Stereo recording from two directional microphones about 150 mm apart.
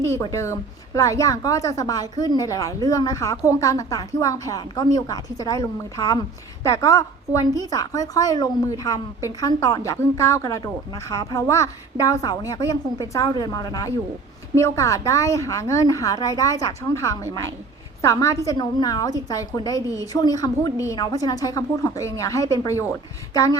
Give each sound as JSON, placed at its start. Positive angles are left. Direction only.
{"t": 0.0, "sound": "a woman's voice", "side_deg": 20}